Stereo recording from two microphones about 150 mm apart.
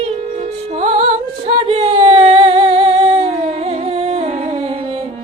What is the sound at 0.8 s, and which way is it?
Music, 45° right (ahead or behind).